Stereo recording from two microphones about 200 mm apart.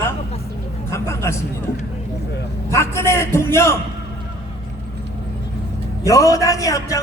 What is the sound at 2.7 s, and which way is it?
A man's voice, 15° left (ahead or behind).